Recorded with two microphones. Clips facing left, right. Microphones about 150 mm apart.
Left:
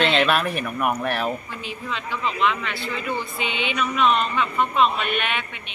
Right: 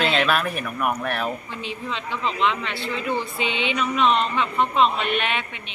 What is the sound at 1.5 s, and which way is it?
Speech, 30° right (ahead or behind).